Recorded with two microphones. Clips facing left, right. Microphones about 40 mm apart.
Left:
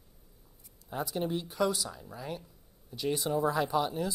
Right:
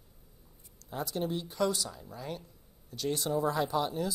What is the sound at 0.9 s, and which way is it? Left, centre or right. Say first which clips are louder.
Speech: left 1 dB; centre.